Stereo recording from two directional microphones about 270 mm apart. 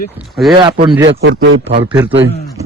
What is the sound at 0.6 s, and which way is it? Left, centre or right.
Speech, centre.